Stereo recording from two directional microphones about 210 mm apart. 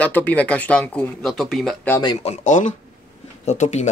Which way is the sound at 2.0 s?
25° left (ahead or behind).